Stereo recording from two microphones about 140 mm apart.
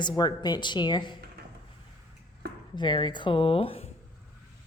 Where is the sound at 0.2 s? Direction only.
30° left (ahead or behind).